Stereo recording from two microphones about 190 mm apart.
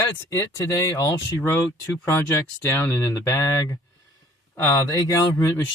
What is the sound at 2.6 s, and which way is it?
Speech, 15° left (ahead or behind).